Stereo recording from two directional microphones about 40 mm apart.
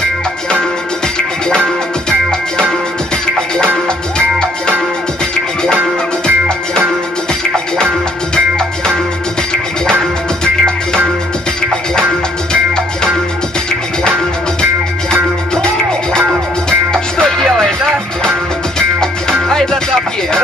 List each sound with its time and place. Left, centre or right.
0.5 s music: centre
7.5 s music: centre
15.5 s music: centre